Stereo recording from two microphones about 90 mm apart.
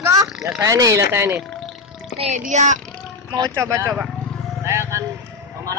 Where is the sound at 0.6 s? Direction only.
40° right (ahead or behind).